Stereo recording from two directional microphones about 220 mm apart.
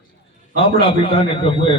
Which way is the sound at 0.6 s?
25° left (ahead or behind).